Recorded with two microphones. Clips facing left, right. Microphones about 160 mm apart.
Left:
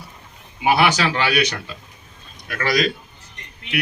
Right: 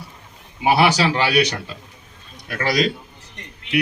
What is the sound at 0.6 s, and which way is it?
A man's voice, 30° right (ahead or behind).